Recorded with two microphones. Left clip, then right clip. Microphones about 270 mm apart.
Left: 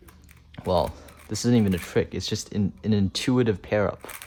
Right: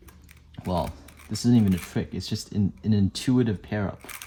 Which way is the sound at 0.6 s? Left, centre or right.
Right.